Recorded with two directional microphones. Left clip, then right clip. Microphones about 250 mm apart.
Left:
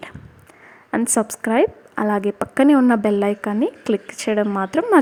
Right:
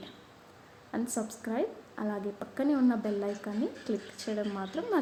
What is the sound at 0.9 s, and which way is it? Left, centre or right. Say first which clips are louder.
A woman's voice: left 15 dB; left.